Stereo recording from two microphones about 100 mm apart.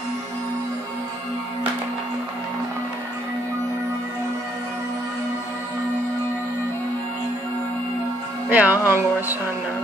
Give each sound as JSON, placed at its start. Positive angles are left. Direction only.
{"t": 8.5, "sound": "music", "side_deg": -15}